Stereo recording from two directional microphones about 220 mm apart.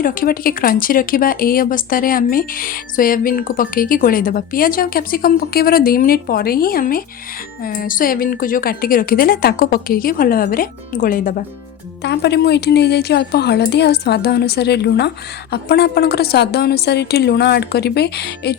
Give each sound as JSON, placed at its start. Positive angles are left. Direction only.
{"t": 0.0, "sound": "speech", "side_deg": 40}
{"t": 12.0, "sound": "speech", "side_deg": 50}